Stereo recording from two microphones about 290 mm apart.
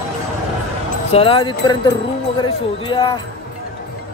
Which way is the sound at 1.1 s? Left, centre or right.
Centre.